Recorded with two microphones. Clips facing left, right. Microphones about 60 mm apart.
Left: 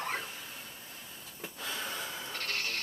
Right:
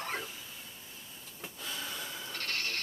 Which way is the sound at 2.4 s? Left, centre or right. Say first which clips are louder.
Even; centre.